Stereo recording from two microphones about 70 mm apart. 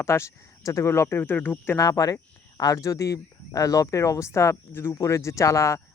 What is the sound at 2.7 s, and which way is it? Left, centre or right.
Speech, left.